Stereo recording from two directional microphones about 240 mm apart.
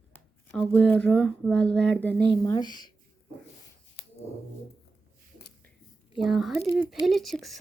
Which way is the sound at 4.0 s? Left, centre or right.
Left.